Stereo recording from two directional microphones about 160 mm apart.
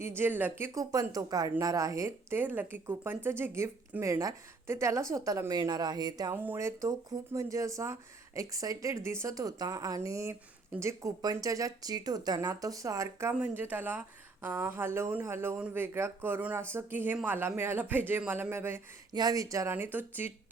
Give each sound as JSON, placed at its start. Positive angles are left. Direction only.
{"t": 0.0, "sound": "speech", "side_deg": -15}